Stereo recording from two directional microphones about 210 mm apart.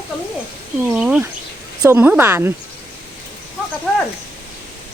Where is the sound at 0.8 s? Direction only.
5° right (ahead or behind).